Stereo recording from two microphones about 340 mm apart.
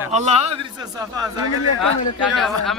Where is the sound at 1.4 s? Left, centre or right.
Left.